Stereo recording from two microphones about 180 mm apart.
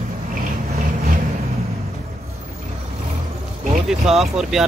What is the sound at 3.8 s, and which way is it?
Speech, centre (ahead or behind).